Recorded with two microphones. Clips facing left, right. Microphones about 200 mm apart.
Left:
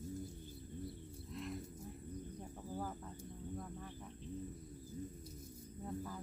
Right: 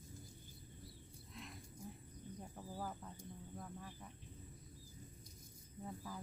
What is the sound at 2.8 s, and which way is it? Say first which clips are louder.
Speech: left 2 dB; 5° right (ahead or behind).